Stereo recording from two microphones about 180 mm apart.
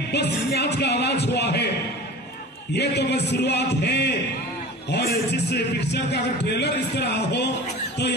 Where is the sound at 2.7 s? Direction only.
70° left (ahead or behind).